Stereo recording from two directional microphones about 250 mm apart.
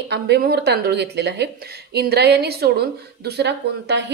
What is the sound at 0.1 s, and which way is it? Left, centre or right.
A woman's voice, right.